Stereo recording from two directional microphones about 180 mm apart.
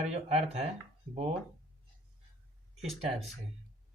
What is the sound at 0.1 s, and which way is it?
Speech, 35° right (ahead or behind).